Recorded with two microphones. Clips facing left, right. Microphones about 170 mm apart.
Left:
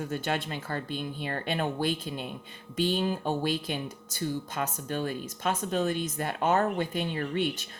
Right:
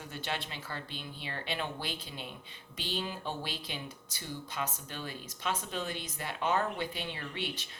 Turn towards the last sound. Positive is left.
turn(degrees=45)  # may be behind; listen again after turning